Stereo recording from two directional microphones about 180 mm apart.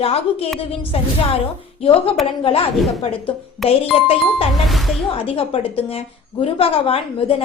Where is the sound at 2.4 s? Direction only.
30° left (ahead or behind).